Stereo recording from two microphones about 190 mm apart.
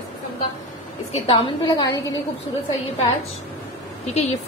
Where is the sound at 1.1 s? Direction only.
25° left (ahead or behind).